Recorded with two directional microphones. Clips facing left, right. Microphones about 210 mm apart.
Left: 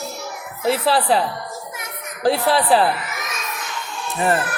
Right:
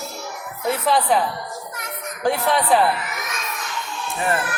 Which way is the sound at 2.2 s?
35° left (ahead or behind).